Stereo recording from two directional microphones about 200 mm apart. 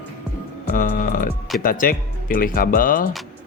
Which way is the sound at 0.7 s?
40° left (ahead or behind).